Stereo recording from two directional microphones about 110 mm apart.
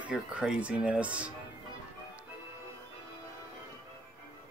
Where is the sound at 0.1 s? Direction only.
10° right (ahead or behind).